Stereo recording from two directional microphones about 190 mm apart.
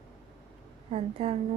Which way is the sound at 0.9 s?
35° right (ahead or behind).